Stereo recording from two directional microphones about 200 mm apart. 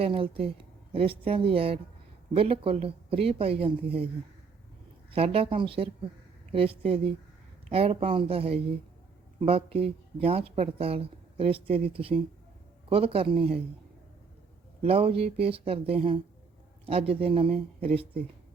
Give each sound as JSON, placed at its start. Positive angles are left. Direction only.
{"t": 0.0, "sound": "speech", "side_deg": -30}
{"t": 5.1, "sound": "speech", "side_deg": -30}
{"t": 14.8, "sound": "speech", "side_deg": -30}